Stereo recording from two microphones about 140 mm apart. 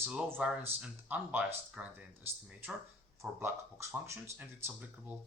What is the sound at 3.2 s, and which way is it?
Speech, 20° right (ahead or behind).